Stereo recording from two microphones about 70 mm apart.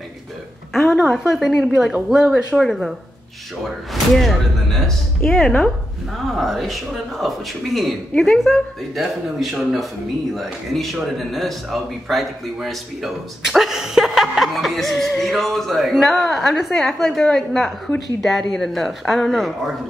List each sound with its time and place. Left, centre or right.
0.9 s speech: centre
3.6 s speech: centre
5.2 s speech: left
6.3 s speech: centre
8.1 s a woman's voice: centre
8.5 s speech: centre